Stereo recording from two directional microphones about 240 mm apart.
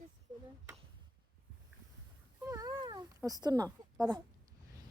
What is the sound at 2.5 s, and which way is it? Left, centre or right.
Cat, centre.